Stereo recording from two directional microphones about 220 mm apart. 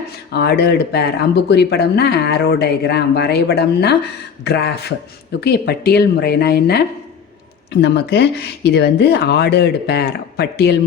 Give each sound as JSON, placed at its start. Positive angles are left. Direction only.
{"t": 0.3, "sound": "speech", "side_deg": 50}